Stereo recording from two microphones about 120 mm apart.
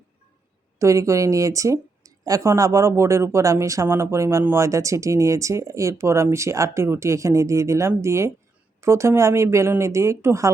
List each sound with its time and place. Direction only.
0.8 s speech: 25° right (ahead or behind)